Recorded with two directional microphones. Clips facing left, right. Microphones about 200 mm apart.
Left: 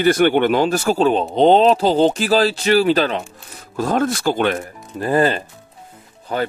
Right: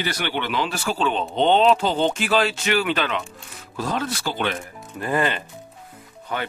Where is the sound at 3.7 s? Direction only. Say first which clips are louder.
Left 7 dB; 50° left (ahead or behind).